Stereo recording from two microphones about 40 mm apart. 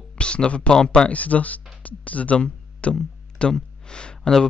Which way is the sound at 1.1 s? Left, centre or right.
Left.